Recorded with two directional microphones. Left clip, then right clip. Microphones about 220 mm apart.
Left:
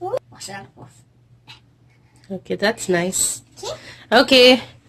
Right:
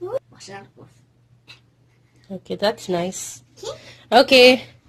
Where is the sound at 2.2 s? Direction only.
Centre (ahead or behind).